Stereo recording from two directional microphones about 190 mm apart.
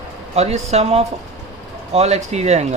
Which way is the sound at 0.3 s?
35° right (ahead or behind).